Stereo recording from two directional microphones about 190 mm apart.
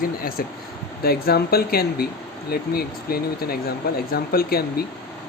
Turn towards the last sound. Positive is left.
turn(degrees=55)  # may be behind; listen again after turning